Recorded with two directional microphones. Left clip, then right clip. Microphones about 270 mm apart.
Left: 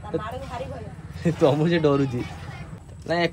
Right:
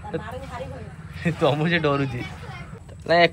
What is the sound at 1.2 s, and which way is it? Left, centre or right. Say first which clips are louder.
Speech: left 1 dB; centre.